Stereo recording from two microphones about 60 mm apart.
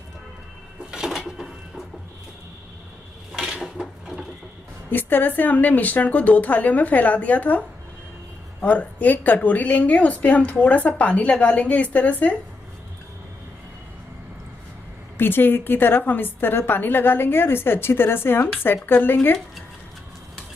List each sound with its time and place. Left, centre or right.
0.9 s a sound: centre
3.3 s dishes: centre
4.8 s a woman's voice: left
8.6 s a woman's voice: left
15.1 s a woman's voice: left